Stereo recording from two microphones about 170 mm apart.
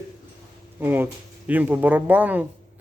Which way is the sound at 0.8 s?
10° right (ahead or behind).